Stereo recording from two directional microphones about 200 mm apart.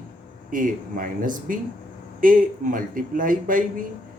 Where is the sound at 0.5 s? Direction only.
40° right (ahead or behind).